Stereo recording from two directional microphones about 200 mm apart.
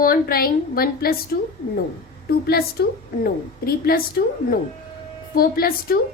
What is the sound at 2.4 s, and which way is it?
A woman's voice, 50° left (ahead or behind).